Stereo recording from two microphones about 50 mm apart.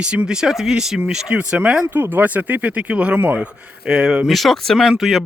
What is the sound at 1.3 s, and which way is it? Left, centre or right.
Speech, right.